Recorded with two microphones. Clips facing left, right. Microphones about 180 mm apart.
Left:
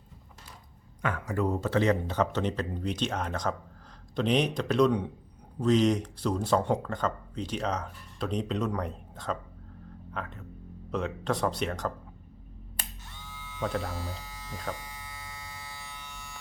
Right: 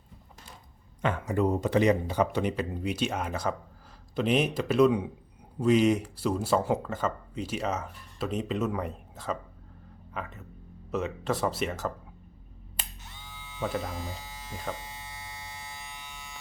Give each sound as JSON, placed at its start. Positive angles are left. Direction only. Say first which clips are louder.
{"t": 1.0, "sound": "speech", "louder": "right 3 dB", "side_deg": -20}
{"t": 13.6, "sound": "speech", "louder": "even", "side_deg": -5}
{"t": 13.8, "sound": "speech", "louder": "even", "side_deg": -20}
{"t": 14.3, "sound": "electric shaver", "louder": "right 1 dB", "side_deg": -25}